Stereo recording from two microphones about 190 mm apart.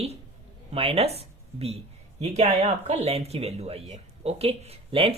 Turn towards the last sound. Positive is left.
turn(degrees=-30)  # may be behind; listen again after turning